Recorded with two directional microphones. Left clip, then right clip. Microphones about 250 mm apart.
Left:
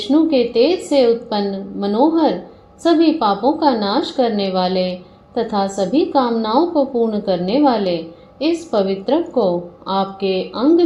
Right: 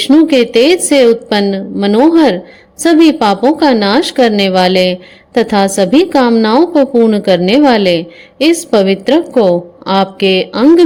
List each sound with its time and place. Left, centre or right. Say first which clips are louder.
0.1 s a woman's voice: right 6 dB; right